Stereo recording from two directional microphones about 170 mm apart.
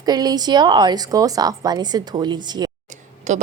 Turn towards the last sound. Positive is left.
turn(degrees=-45)  # may be behind; listen again after turning